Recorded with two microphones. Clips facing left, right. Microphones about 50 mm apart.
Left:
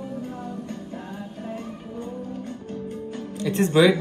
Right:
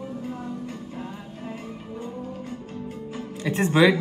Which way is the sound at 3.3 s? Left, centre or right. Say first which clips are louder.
Left 1 dB; right.